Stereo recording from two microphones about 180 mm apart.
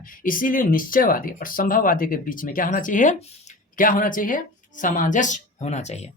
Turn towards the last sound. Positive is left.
turn(degrees=40)  # may be behind; listen again after turning